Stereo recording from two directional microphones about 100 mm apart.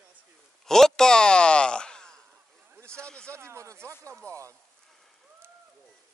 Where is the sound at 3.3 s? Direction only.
25° right (ahead or behind).